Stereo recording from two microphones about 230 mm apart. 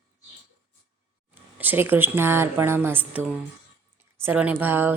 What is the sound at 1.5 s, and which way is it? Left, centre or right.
A woman's voice, centre.